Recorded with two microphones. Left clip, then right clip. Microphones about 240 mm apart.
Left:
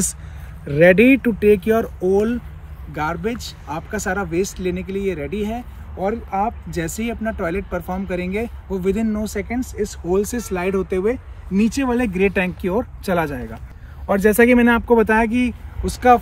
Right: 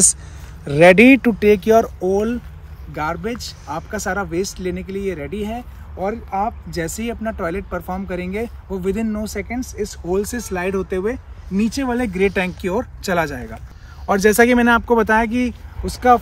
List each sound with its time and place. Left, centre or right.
0.7 s speech: right; by 13.6 s centre
14.0 s speech: centre